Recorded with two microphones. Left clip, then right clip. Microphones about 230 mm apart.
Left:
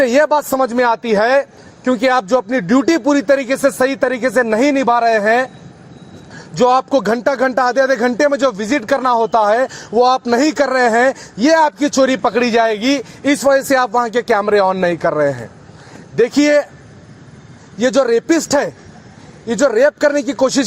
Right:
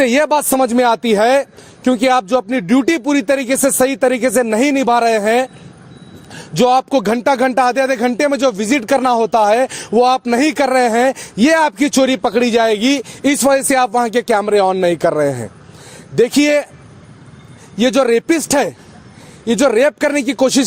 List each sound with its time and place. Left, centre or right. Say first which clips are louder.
0.0 s a man's voice: left 1 dB; right
17.7 s a man's voice: even; right